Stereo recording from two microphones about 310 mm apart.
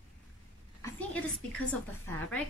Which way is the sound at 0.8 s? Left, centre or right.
Centre.